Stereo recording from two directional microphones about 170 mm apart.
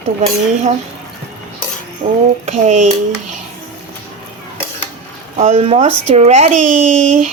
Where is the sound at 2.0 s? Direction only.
30° right (ahead or behind).